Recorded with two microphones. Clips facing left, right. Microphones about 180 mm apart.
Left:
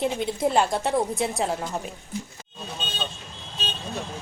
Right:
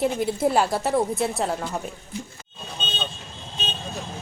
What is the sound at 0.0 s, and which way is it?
A woman's voice, 5° right (ahead or behind).